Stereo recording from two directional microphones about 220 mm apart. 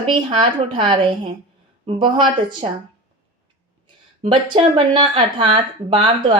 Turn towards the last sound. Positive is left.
turn(degrees=-25)  # may be behind; listen again after turning